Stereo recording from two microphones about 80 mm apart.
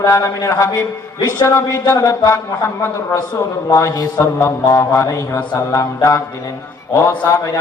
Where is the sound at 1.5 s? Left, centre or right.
Left.